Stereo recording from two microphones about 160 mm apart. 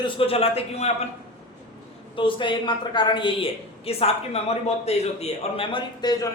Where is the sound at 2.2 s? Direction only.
30° left (ahead or behind).